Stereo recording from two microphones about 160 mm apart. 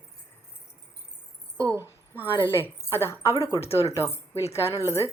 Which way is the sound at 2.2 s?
15° left (ahead or behind).